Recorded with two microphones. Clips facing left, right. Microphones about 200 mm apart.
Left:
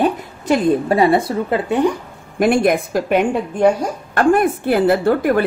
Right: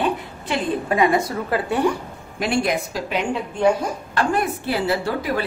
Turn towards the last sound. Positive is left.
turn(degrees=55)  # may be behind; listen again after turning